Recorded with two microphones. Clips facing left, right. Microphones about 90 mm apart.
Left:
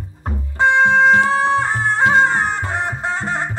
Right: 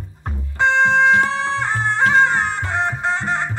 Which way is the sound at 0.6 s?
15° left (ahead or behind).